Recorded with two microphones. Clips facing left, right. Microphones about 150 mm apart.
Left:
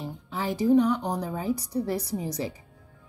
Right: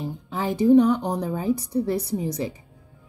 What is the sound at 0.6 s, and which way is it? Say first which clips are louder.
A woman's voice: right 5 dB; 20° right (ahead or behind).